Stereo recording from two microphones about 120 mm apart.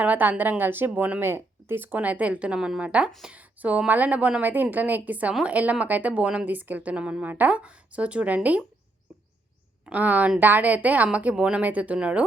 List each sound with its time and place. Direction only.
0.0 s a woman's voice: 15° right (ahead or behind)
3.3 s a woman's voice: 10° right (ahead or behind)
9.8 s a woman's voice: 15° right (ahead or behind)